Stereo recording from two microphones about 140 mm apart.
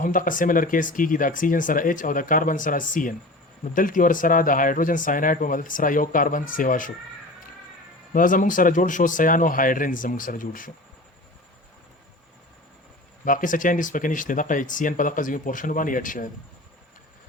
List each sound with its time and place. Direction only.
0.0 s speech: 75° left (ahead or behind)
8.1 s speech: 70° left (ahead or behind)
13.2 s speech: 75° left (ahead or behind)